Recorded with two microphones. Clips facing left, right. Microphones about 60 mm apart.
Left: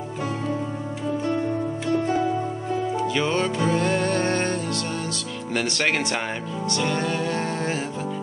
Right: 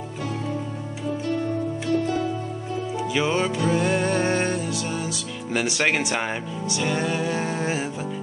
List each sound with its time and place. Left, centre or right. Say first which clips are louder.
1.9 s music: left 1 dB; left
3.0 s music: right 3 dB; centre